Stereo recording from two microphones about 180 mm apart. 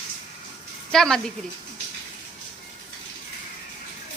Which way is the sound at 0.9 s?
5° left (ahead or behind).